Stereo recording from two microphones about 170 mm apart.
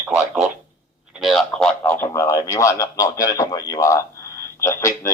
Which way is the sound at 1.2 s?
Centre (ahead or behind).